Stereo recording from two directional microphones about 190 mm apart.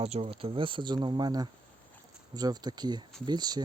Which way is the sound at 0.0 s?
35° right (ahead or behind).